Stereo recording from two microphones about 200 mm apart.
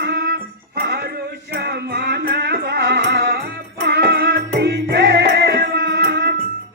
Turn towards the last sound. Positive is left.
turn(degrees=-55)  # may be behind; listen again after turning